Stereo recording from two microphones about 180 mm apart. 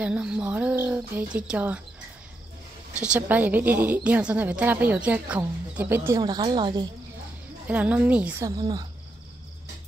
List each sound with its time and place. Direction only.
0.0 s a woman's voice: 5° right (ahead or behind)
3.0 s a woman's voice: 10° right (ahead or behind)
6.2 s a woman's voice: 25° right (ahead or behind)
7.6 s a woman's voice: 10° right (ahead or behind)
8.5 s a woman's voice: 20° right (ahead or behind)